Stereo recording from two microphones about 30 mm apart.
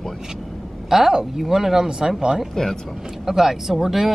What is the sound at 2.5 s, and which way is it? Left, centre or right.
Speech, centre.